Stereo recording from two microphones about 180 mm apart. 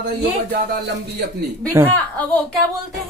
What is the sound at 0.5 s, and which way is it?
Speech, 65° right (ahead or behind).